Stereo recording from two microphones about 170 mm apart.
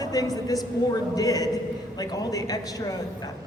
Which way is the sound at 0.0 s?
20° left (ahead or behind).